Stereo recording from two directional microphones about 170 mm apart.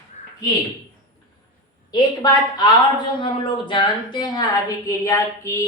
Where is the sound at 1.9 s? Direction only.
25° left (ahead or behind).